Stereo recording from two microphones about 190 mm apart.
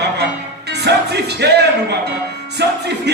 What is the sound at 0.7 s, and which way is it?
Music, 60° right (ahead or behind).